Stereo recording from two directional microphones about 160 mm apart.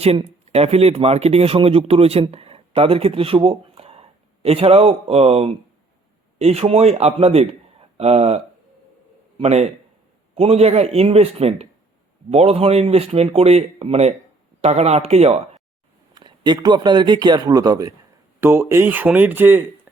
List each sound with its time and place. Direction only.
0.0 s a man's voice: 40° right (ahead or behind)
9.4 s speech: 40° right (ahead or behind)
16.1 s speech: 25° right (ahead or behind); by 19.6 s 10° right (ahead or behind)